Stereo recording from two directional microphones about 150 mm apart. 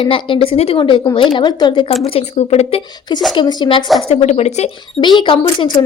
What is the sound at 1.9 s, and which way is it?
Speech, 45° left (ahead or behind).